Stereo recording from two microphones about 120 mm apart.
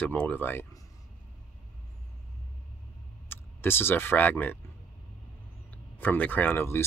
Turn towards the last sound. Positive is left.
turn(degrees=20)  # may be behind; listen again after turning